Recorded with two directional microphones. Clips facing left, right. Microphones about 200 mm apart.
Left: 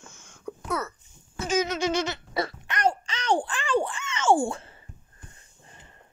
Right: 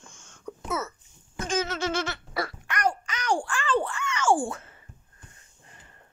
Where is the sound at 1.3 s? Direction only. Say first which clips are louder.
Left 3 dB; 10° left (ahead or behind); by 4.8 s 30° left (ahead or behind).